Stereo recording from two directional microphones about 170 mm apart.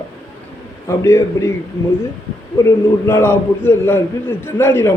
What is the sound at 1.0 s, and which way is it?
Speech, 15° left (ahead or behind).